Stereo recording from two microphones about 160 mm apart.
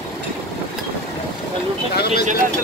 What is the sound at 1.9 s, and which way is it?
Speech, 85° left.